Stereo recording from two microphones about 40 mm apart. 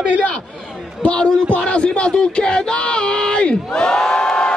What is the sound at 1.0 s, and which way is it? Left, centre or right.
Speech, left.